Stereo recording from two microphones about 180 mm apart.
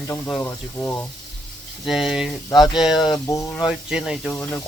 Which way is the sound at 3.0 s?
20° left (ahead or behind).